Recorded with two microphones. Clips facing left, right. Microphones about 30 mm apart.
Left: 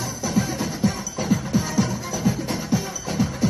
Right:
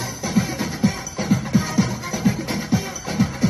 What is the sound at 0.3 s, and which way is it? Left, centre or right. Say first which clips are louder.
Music: right 2 dB; centre.